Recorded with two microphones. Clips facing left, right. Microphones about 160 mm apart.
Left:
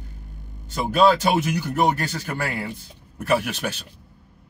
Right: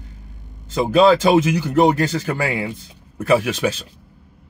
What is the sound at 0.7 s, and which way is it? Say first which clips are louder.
A man's voice: right 4 dB; 90° right.